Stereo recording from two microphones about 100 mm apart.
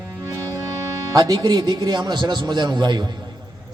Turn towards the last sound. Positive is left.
turn(degrees=-45)  # may be behind; listen again after turning